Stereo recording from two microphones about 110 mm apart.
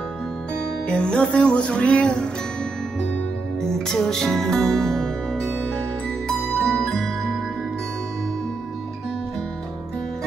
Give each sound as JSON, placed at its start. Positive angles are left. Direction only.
{"t": 0.8, "sound": "music", "side_deg": 10}
{"t": 3.6, "sound": "music", "side_deg": 5}